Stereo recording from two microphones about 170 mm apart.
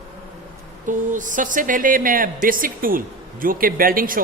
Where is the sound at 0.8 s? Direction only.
50° right (ahead or behind).